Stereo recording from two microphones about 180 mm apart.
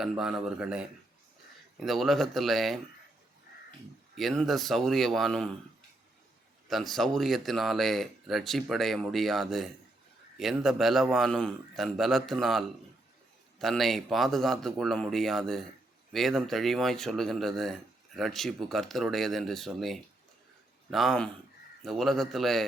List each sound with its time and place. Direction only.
0.0 s speech: centre (ahead or behind)
4.1 s speech: centre (ahead or behind)
6.7 s speech: centre (ahead or behind)